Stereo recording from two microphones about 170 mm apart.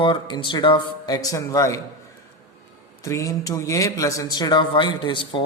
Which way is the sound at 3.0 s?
20° left (ahead or behind).